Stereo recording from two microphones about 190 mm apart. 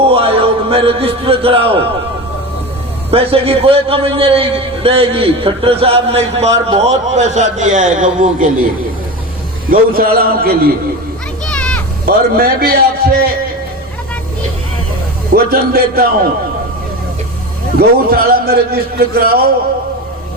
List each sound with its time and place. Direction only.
0.0 s a sound: 30° right (ahead or behind)
3.1 s a man's voice: 30° right (ahead or behind)
9.6 s a man's voice: 50° right (ahead or behind)
11.4 s children playing: 5° left (ahead or behind)
12.0 s a man's voice: 55° right (ahead or behind)
15.3 s a man's voice: 55° right (ahead or behind)
17.7 s a man's voice: 55° right (ahead or behind)